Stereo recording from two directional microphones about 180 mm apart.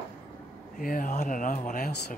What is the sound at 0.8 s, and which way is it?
Speech, 50° left (ahead or behind).